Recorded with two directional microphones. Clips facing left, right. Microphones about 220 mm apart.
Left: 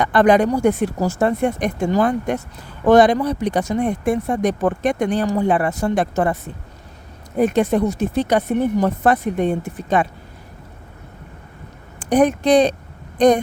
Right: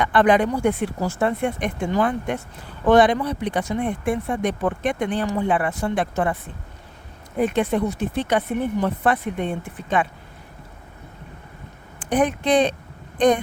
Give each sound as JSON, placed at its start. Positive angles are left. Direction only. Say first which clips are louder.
{"t": 0.0, "sound": "speech", "louder": "left 3 dB", "side_deg": 40}
{"t": 11.9, "sound": "speech", "louder": "left 5 dB", "side_deg": 40}